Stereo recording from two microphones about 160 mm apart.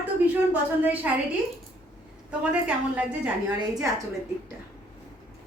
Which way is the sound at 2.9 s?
5° right (ahead or behind).